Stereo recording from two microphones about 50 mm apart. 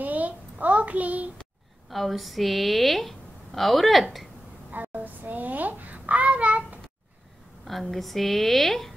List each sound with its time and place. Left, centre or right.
0.0 s a sound: right
1.9 s a woman's voice: centre
4.6 s babbling: right
7.6 s a woman's voice: centre